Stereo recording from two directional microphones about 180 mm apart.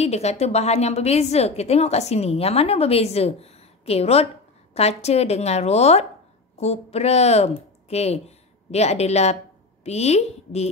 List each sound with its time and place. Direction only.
0.0 s a woman's voice: 35° left (ahead or behind)